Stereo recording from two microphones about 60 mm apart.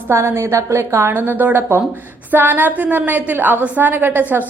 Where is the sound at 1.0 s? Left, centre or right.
Right.